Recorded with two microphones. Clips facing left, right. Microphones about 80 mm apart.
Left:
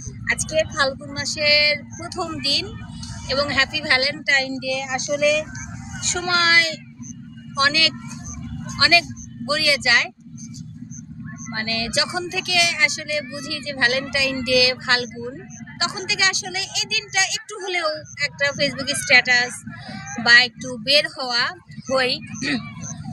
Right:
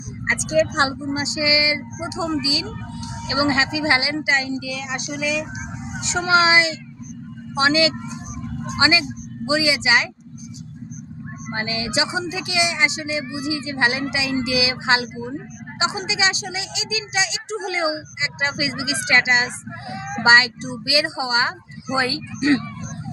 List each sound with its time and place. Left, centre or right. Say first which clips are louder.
0.3 s speech: right 2 dB; right
11.4 s speech: right 1 dB; centre